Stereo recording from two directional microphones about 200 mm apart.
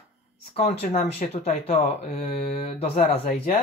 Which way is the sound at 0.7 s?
35° left (ahead or behind).